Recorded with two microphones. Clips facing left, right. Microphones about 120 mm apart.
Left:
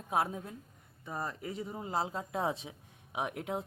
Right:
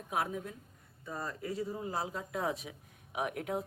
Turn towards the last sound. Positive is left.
turn(degrees=25)  # may be behind; listen again after turning